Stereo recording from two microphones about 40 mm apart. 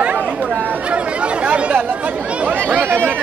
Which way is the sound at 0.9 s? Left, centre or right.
Right.